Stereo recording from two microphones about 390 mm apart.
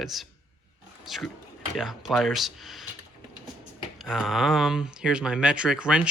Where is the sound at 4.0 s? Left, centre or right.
Centre.